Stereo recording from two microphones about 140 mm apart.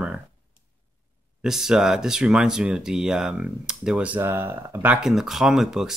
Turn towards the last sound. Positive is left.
turn(degrees=-5)  # may be behind; listen again after turning